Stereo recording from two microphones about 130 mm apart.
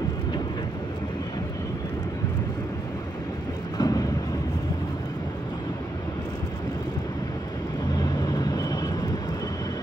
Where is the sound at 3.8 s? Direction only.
30° left (ahead or behind).